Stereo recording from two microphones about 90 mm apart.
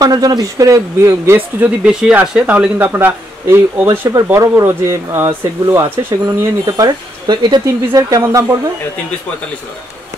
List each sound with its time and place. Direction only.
0.0 s speech: 45° right (ahead or behind); by 1.7 s 30° right (ahead or behind)
1.9 s speech: 10° right (ahead or behind); by 6.3 s 25° right (ahead or behind)
6.6 s speech: 50° right (ahead or behind)
7.6 s speech: 35° right (ahead or behind)